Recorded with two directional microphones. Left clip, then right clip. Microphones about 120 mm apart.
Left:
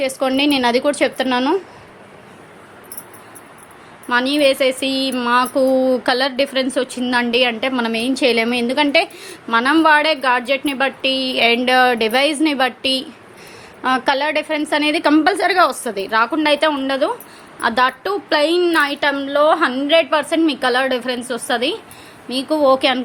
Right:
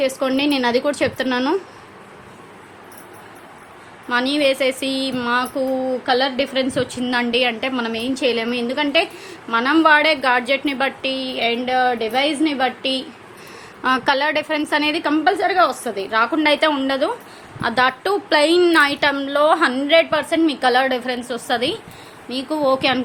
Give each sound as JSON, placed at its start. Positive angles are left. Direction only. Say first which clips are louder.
{"t": 0.0, "sound": "a woman's voice", "louder": "left 2 dB", "side_deg": 20}
{"t": 4.1, "sound": "a woman's voice", "louder": "left 3 dB", "side_deg": 25}
{"t": 5.5, "sound": "a woman's voice", "louder": "left 6 dB", "side_deg": 60}
{"t": 6.7, "sound": "a woman's voice", "louder": "left 2 dB", "side_deg": 25}
{"t": 11.1, "sound": "a woman's voice", "louder": "left 5 dB", "side_deg": 40}
{"t": 13.8, "sound": "a woman's voice", "louder": "left 1 dB", "side_deg": 10}
{"t": 15.2, "sound": "a woman's voice", "louder": "left 2 dB", "side_deg": 55}